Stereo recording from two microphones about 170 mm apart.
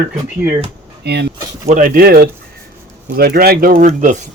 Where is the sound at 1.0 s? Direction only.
75° right (ahead or behind).